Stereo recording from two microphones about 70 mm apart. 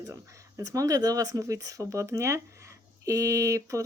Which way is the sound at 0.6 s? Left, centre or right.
Right.